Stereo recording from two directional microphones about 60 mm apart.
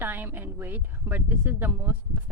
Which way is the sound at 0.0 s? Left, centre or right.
Right.